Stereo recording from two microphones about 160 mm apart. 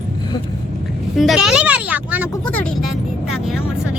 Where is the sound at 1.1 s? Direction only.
Centre (ahead or behind).